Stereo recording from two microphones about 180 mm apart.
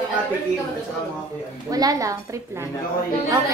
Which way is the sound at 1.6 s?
20° right (ahead or behind).